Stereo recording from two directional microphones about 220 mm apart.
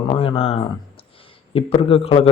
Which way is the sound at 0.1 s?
25° left (ahead or behind).